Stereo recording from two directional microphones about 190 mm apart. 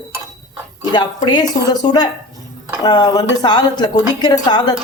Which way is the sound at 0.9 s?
25° left (ahead or behind).